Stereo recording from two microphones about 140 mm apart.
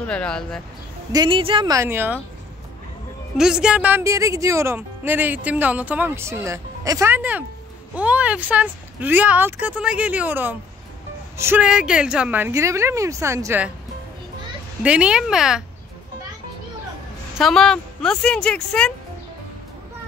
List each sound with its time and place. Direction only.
0.0 s speech: 5° left (ahead or behind)
1.1 s a woman's voice: 35° right (ahead or behind)
1.7 s a woman's voice: 20° right (ahead or behind)
3.3 s a woman's voice: 5° right (ahead or behind)
11.6 s a woman's voice: 5° right (ahead or behind)
14.8 s speech: 10° right (ahead or behind)
17.4 s speech: centre (ahead or behind)